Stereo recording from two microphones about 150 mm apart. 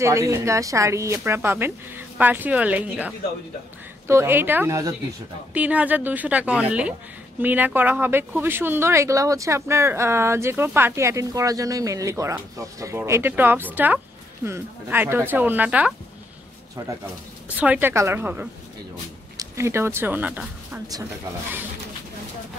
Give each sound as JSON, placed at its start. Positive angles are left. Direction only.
{"t": 0.0, "sound": "speech", "side_deg": -20}
{"t": 4.1, "sound": "speech", "side_deg": -15}
{"t": 5.5, "sound": "speech", "side_deg": -10}
{"t": 17.6, "sound": "speech", "side_deg": -10}